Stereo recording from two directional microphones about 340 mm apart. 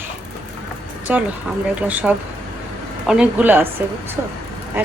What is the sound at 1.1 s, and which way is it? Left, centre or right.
Speech, centre.